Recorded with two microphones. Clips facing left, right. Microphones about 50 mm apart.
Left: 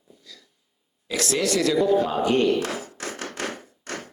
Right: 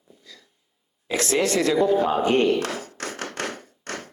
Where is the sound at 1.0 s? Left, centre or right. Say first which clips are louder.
Right 2 dB; right.